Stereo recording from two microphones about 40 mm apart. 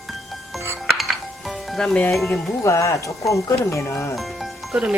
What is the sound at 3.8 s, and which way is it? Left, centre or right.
Speech, left.